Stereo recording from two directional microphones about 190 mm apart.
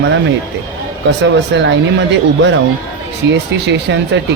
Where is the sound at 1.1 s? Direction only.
65° right (ahead or behind).